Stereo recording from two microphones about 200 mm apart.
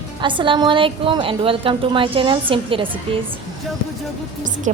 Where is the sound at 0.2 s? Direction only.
25° right (ahead or behind).